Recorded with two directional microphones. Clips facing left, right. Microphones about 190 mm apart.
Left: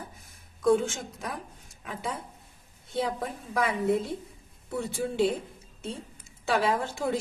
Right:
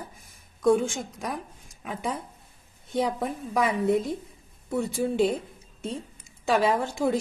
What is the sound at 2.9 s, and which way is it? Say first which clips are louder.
A woman's voice: right 3 dB; 15° right (ahead or behind).